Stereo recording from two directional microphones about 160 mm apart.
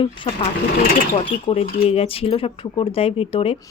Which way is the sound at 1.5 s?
35° left (ahead or behind).